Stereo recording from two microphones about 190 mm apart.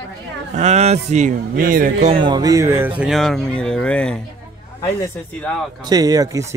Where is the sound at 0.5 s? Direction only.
35° right (ahead or behind).